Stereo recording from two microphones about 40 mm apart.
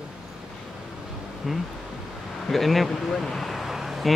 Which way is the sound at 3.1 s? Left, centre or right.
Centre.